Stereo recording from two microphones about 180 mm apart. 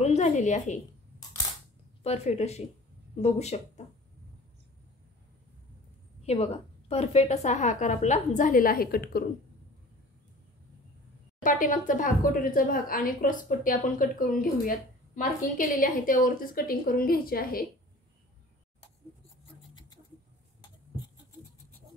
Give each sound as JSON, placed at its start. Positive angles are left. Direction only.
{"t": 0.0, "sound": "a woman's voice", "side_deg": 40}
{"t": 2.0, "sound": "a woman's voice", "side_deg": 35}
{"t": 6.2, "sound": "a woman's voice", "side_deg": 35}
{"t": 11.4, "sound": "speech", "side_deg": 45}